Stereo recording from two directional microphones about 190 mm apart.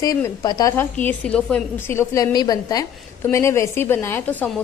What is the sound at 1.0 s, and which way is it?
A woman's voice, 5° left (ahead or behind).